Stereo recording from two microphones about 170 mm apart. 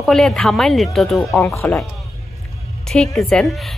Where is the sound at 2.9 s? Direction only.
Centre (ahead or behind).